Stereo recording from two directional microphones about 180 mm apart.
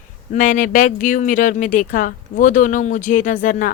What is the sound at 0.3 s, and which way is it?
A woman's voice, 45° left (ahead or behind).